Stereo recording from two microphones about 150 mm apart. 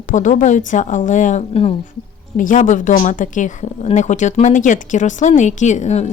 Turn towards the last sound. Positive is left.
turn(degrees=50)  # may be behind; listen again after turning